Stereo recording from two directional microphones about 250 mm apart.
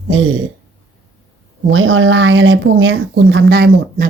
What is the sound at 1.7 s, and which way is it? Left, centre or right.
Speech, right.